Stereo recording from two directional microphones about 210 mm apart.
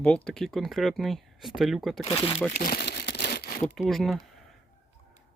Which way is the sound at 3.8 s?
Centre (ahead or behind).